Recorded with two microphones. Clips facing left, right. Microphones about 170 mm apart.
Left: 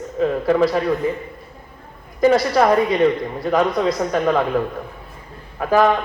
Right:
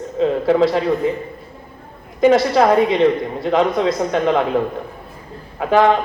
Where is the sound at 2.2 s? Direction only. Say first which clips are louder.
Right 2 dB; 20° right (ahead or behind).